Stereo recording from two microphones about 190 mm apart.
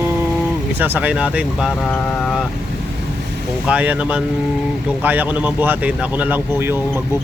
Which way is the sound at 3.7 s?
5° right (ahead or behind).